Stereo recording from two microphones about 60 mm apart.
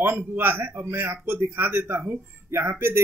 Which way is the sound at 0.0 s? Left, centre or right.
Right.